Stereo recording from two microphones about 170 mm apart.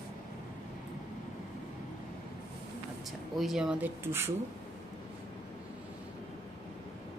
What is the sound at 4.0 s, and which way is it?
Speech, 15° right (ahead or behind).